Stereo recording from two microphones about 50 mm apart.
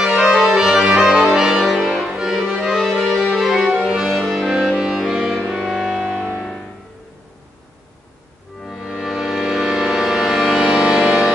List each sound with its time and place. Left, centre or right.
0.0 s music: centre
0.9 s organ: centre
1.3 s music: centre
2.1 s accordion: centre
2.4 s music: right
2.7 s music: centre
4.1 s music: centre
8.6 s music: centre